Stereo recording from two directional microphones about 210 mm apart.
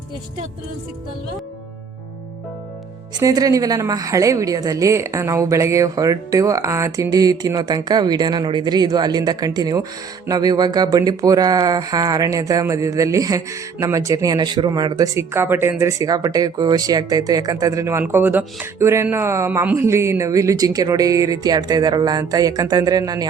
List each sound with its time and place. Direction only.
3.2 s speech: 15° right (ahead or behind)